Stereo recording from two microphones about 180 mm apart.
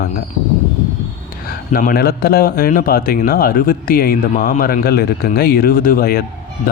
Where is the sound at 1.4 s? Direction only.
50° left (ahead or behind).